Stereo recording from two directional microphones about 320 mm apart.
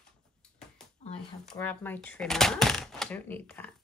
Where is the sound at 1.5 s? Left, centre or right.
Centre.